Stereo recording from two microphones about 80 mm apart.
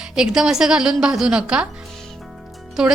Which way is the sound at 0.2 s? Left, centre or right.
Centre.